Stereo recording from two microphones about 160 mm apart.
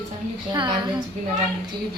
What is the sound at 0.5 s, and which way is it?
Speech, 30° right (ahead or behind).